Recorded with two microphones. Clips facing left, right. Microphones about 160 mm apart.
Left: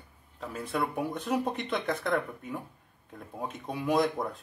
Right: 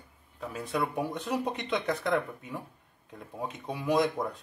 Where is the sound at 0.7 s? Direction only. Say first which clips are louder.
Even; centre (ahead or behind).